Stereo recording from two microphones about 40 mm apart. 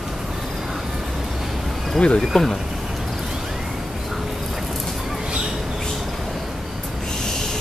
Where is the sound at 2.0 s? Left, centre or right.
Left.